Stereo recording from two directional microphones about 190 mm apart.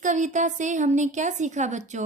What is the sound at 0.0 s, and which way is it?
A woman's voice, 40° right (ahead or behind).